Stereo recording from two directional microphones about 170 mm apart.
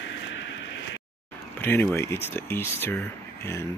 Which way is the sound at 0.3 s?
90° left.